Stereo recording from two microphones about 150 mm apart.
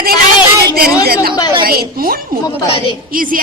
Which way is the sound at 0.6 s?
90° right.